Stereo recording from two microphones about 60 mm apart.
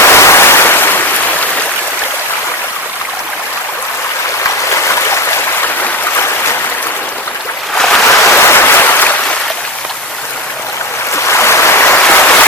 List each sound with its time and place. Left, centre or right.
0.0 s waves: left
4.7 s stream: left
7.8 s waves: centre
8.0 s a sound: left
11.1 s waves: left
12.1 s a sound: left